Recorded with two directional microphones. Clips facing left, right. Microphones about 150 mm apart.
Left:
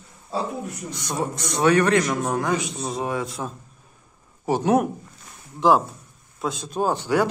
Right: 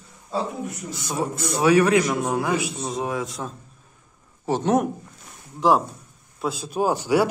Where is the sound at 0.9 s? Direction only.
5° right (ahead or behind).